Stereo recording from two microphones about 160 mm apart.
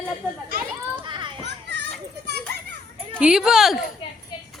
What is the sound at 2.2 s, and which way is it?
Children playing, 90° right.